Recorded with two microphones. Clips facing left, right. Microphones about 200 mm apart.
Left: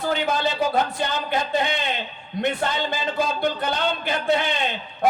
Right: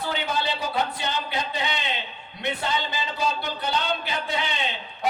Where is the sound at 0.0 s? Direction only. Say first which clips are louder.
Left 5 dB; 45° left (ahead or behind).